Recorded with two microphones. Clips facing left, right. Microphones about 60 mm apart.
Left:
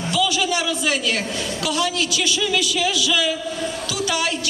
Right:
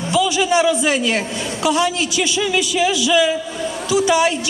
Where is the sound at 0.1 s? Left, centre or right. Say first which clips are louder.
Right 5 dB; right.